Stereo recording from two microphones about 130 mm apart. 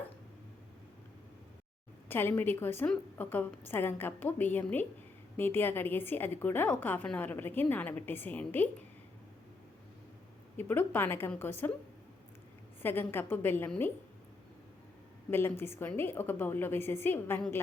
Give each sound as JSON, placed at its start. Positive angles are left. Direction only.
{"t": 2.0, "sound": "a woman's voice", "side_deg": 15}
{"t": 10.6, "sound": "a woman's voice", "side_deg": 15}
{"t": 12.8, "sound": "a woman's voice", "side_deg": 15}
{"t": 15.3, "sound": "a woman's voice", "side_deg": 15}